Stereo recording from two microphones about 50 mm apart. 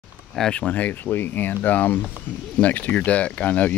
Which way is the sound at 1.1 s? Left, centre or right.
Left.